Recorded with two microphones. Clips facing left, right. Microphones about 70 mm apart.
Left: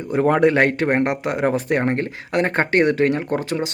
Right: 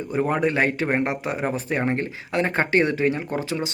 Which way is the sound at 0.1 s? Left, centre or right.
Left.